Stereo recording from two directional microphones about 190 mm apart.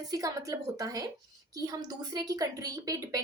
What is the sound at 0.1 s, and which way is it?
A woman's voice, 15° right (ahead or behind).